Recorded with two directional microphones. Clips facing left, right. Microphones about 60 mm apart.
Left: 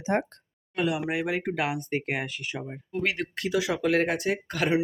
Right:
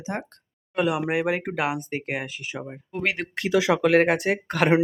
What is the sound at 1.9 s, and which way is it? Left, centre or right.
Speech, centre.